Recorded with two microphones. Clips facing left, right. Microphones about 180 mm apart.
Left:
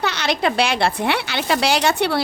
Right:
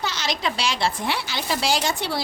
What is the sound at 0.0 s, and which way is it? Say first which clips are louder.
A woman's voice: left 6 dB; 60° left (ahead or behind).